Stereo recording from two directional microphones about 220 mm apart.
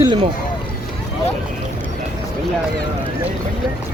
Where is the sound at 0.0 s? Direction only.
25° right (ahead or behind).